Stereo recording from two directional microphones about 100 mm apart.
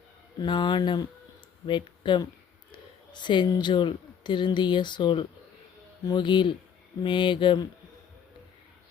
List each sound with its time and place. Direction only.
0.3 s speech: 50° left (ahead or behind)